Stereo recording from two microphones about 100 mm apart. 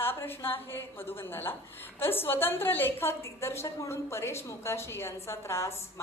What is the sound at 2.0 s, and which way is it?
A woman's voice, 20° left (ahead or behind).